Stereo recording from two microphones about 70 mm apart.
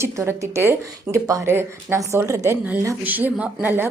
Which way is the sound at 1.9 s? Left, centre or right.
Right.